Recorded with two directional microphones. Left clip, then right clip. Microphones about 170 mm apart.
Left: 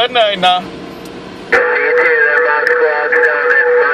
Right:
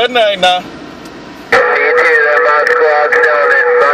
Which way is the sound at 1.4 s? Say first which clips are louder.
Right 2 dB; 45° right (ahead or behind).